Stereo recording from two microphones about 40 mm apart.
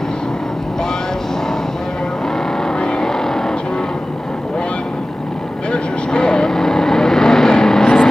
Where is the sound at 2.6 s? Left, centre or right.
Left.